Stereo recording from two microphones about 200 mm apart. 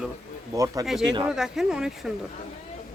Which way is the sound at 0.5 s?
15° right (ahead or behind).